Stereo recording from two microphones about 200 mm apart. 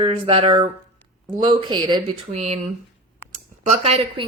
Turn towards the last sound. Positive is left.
turn(degrees=-30)  # may be behind; listen again after turning